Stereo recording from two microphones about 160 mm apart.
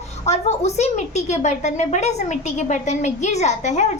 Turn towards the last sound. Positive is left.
turn(degrees=45)  # may be behind; listen again after turning